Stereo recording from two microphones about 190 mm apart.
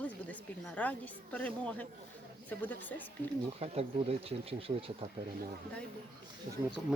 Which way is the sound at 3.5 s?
30° right (ahead or behind).